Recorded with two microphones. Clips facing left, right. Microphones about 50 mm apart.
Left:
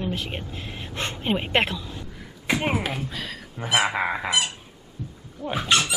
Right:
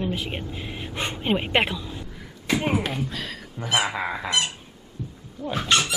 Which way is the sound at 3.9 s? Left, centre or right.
Left.